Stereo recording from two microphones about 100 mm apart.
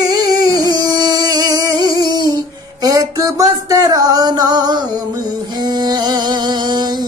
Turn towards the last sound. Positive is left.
turn(degrees=-45)  # may be behind; listen again after turning